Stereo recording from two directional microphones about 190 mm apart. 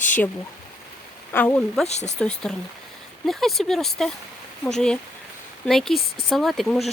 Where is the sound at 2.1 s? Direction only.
5° left (ahead or behind).